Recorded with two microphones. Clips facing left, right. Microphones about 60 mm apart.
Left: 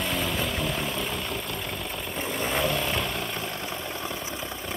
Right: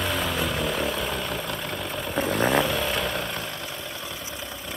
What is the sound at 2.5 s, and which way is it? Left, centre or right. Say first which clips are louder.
Vehicle: right 3 dB; centre.